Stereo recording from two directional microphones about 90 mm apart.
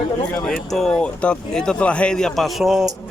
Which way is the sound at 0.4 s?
5° left (ahead or behind).